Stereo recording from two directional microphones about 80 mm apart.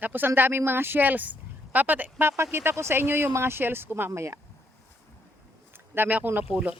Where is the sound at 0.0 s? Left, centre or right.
Right.